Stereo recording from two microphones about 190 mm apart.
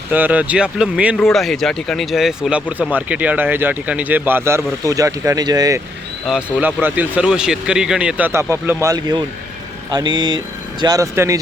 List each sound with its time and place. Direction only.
0.1 s a man's voice: 10° right (ahead or behind)
6.6 s a man's voice: 10° right (ahead or behind)